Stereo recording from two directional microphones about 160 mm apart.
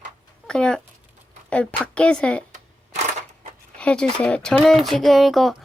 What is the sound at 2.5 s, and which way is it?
Shuffling cards, 50° right (ahead or behind).